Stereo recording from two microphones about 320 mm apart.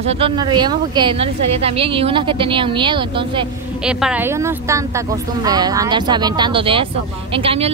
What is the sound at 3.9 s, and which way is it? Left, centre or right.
Speech, centre.